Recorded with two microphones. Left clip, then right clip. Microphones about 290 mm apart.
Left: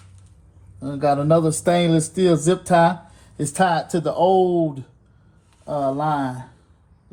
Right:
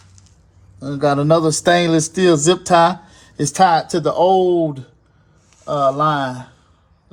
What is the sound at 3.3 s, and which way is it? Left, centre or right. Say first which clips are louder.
Speech: right 6 dB; right.